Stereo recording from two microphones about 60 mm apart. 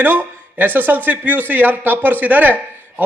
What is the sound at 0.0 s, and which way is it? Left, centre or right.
A man's voice, right.